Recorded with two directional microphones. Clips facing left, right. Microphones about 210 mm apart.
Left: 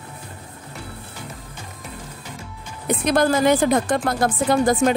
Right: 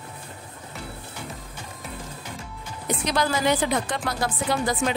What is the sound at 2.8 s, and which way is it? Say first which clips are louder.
A woman's voice: left 7 dB; 55° left (ahead or behind).